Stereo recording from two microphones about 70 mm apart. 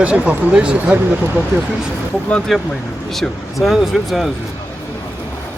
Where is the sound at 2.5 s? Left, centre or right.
Centre.